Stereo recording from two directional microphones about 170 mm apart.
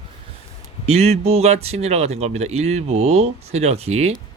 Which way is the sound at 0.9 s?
40° right (ahead or behind).